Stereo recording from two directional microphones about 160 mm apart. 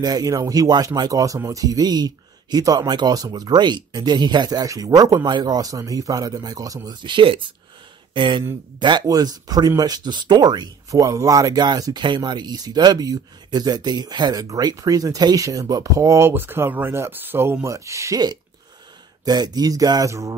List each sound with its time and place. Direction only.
0.0 s speech: 25° right (ahead or behind)